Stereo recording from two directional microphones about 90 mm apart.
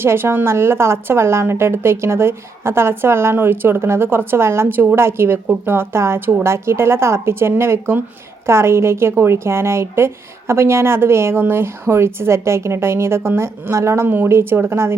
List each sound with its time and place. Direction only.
0.0 s a woman's voice: 25° right (ahead or behind)